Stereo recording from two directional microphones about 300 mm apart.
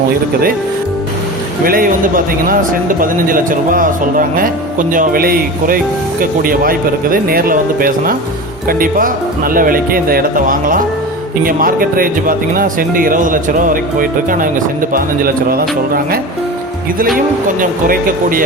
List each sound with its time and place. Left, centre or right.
1.6 s speech: right
17.2 s speech: right